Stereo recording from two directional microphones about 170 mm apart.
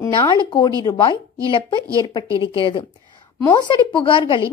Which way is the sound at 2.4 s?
30° left (ahead or behind).